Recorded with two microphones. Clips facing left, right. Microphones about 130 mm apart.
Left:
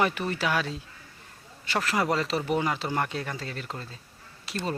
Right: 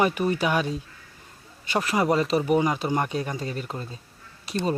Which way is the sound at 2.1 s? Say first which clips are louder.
Right 5 dB; 20° right (ahead or behind).